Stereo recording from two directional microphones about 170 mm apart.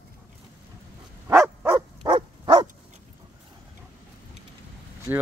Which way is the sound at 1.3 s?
15° right (ahead or behind).